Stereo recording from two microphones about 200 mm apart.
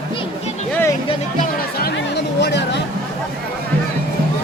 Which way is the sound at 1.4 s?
50° left (ahead or behind).